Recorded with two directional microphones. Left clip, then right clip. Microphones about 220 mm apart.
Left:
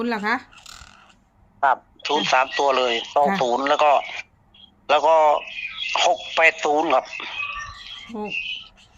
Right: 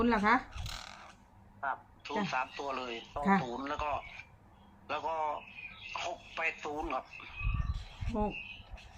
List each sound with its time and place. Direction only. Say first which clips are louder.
0.0 s speech: left 5 dB; 45° left (ahead or behind)
0.5 s a sound: left 2 dB; centre (ahead or behind)
1.6 s speech: left 18 dB; 45° left (ahead or behind)